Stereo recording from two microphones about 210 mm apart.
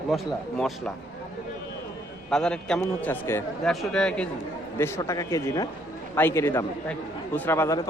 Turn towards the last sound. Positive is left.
turn(degrees=15)  # may be behind; listen again after turning